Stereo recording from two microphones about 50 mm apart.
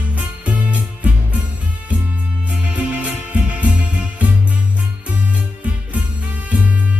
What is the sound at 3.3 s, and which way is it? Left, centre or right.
Music, right.